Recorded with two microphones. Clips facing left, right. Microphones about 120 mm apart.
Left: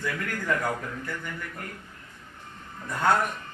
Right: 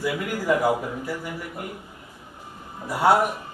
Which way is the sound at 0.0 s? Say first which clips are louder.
Right 5 dB; 10° right (ahead or behind).